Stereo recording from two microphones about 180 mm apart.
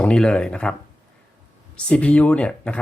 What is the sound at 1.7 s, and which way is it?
Speech, 5° left (ahead or behind).